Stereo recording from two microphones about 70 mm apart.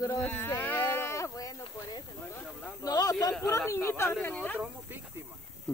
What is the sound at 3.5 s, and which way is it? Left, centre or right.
Speech, left.